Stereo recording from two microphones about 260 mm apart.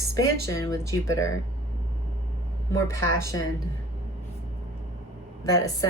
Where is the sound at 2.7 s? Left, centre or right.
Centre.